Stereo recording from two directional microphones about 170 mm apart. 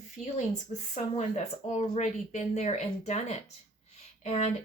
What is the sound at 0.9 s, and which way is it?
Speech, 45° left (ahead or behind).